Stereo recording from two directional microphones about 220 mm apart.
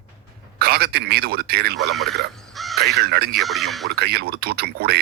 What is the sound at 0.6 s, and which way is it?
Speech, 45° right (ahead or behind).